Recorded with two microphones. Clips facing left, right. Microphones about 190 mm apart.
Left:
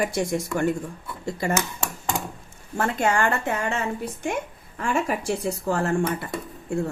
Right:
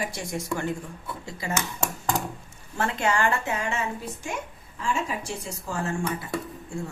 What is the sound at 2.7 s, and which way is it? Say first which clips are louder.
Speech: left 3 dB; 45° left (ahead or behind).